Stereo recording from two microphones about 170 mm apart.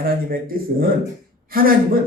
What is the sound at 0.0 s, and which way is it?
A man's voice, 60° right (ahead or behind).